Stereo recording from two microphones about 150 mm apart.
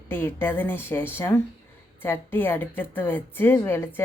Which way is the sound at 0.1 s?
15° left (ahead or behind).